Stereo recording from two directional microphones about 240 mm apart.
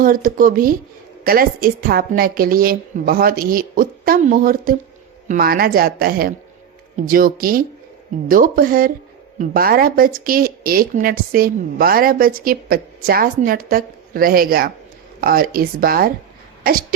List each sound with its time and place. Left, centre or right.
0.0 s speech: right